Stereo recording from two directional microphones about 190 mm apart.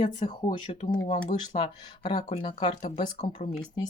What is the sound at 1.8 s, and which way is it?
Speech, 25° left (ahead or behind).